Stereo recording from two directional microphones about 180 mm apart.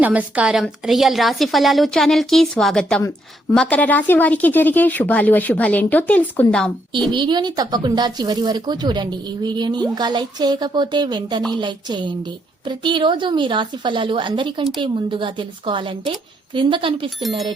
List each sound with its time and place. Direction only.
0.0 s a woman's voice: 10° right (ahead or behind)
7.1 s speech: 25° right (ahead or behind)
17.2 s a woman's voice: centre (ahead or behind)